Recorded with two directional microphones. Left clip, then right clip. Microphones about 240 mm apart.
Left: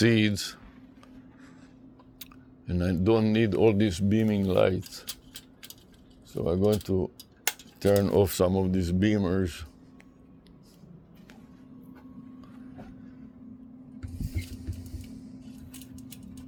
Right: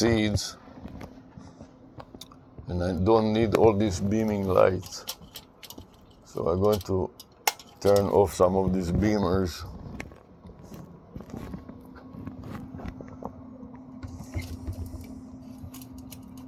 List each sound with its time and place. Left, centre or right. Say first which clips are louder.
0.0 s speech: even; left
2.6 s speech: right 2 dB; left
6.4 s speech: right 2 dB; left
6.9 s dishes: right 1 dB; left
7.8 s speech: right 2 dB; left